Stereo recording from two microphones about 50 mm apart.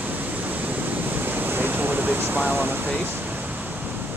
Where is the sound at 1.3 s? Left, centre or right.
Right.